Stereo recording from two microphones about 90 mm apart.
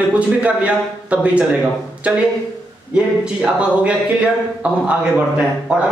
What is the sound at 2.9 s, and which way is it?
Speech, 10° right (ahead or behind).